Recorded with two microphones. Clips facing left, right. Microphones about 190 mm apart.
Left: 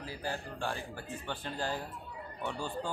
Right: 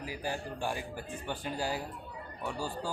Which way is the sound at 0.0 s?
15° right (ahead or behind).